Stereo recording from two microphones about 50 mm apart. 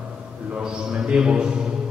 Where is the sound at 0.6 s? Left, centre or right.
Centre.